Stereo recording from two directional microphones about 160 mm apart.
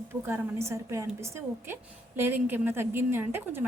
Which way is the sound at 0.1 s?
15° right (ahead or behind).